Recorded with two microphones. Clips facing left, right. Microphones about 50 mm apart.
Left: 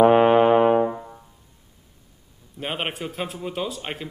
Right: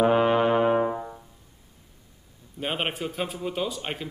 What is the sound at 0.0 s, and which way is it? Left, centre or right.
Brass instrument, left.